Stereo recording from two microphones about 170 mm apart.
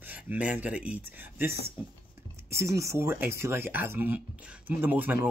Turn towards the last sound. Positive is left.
turn(degrees=-10)  # may be behind; listen again after turning